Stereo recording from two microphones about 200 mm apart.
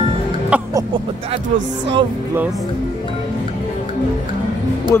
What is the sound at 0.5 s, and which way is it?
Speech, 5° right (ahead or behind).